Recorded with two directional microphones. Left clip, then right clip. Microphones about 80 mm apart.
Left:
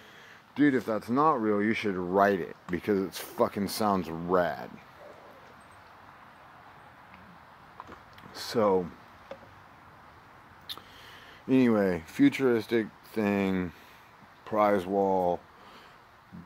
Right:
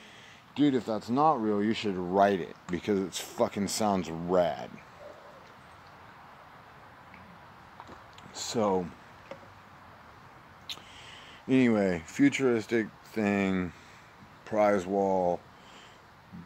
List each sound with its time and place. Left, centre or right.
0.6 s speech: centre
8.4 s speech: centre
11.4 s speech: centre